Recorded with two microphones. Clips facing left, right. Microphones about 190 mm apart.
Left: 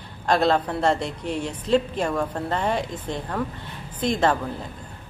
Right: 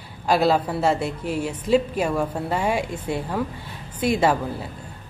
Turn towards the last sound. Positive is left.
turn(degrees=-10)  # may be behind; listen again after turning